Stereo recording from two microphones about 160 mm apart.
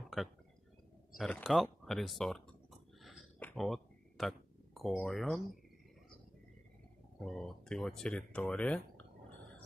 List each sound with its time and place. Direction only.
1.1 s speech: 5° left (ahead or behind)
3.0 s a sound: centre (ahead or behind)
4.8 s speech: centre (ahead or behind)
7.2 s speech: centre (ahead or behind)